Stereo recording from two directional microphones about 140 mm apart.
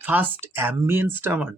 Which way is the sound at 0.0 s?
10° right (ahead or behind).